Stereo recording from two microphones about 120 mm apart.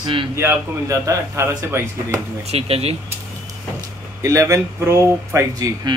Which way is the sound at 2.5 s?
60° right (ahead or behind).